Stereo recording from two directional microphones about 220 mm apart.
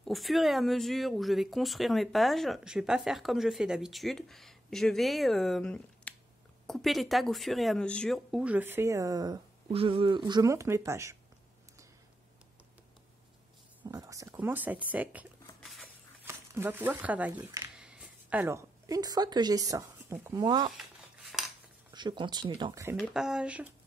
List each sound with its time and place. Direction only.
0.0 s speech: centre (ahead or behind)
13.8 s speech: 15° right (ahead or behind)
16.3 s speech: 10° right (ahead or behind)
21.3 s cutlery: centre (ahead or behind)
21.9 s speech: 20° right (ahead or behind)
22.9 s speech: 5° right (ahead or behind)